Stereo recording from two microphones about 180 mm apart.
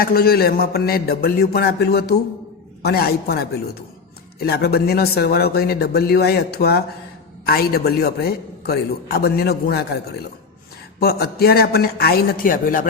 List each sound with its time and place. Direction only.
0.0 s a man's voice: 55° left (ahead or behind)